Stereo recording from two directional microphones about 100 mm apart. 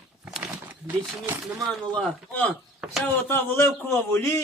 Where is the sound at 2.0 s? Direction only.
15° left (ahead or behind).